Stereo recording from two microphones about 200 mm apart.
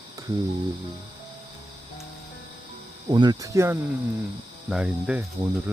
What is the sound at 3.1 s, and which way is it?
Speech, 20° right (ahead or behind).